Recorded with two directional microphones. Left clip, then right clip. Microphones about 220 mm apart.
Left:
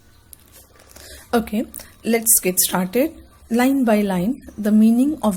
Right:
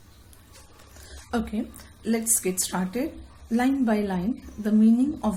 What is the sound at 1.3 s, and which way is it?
A woman's voice, 40° left (ahead or behind).